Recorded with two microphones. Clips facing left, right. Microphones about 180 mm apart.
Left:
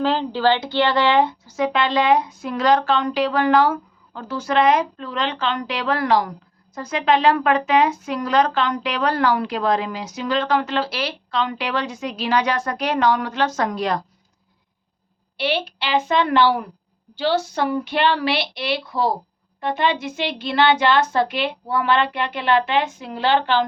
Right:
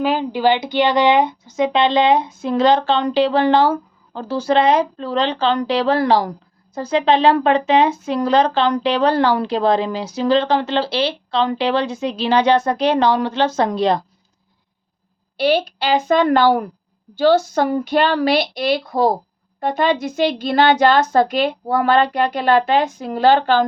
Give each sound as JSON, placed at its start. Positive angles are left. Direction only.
{"t": 0.0, "sound": "speech", "side_deg": -10}
{"t": 15.4, "sound": "a woman's voice", "side_deg": -40}